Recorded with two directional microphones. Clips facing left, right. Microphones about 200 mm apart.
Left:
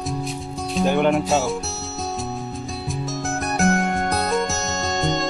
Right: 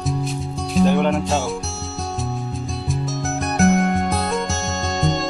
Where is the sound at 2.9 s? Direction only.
Centre (ahead or behind).